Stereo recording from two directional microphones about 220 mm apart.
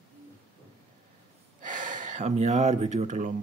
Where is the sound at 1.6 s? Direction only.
35° right (ahead or behind).